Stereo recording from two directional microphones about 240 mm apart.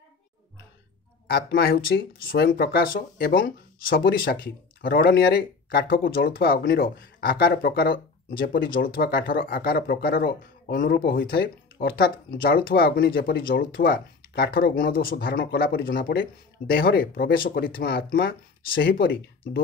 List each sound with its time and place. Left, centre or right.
1.2 s speech: left